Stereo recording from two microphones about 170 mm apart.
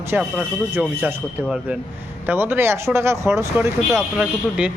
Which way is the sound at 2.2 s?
15° right (ahead or behind).